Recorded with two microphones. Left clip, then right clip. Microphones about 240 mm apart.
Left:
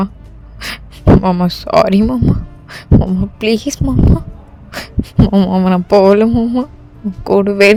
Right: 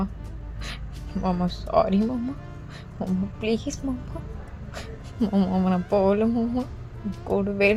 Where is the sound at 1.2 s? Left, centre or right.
Left.